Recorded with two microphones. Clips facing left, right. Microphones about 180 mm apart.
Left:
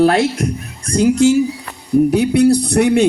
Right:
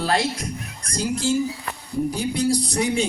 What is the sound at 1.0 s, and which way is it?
A man's voice, 75° left (ahead or behind).